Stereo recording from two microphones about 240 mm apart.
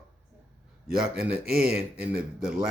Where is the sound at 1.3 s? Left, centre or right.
Right.